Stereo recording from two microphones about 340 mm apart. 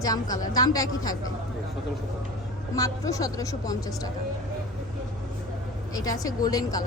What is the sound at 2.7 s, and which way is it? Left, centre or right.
A woman's voice, centre.